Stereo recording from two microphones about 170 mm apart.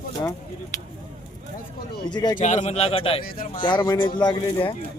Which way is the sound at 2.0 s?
25° left (ahead or behind).